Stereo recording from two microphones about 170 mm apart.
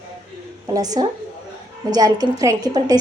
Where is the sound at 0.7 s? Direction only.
20° right (ahead or behind).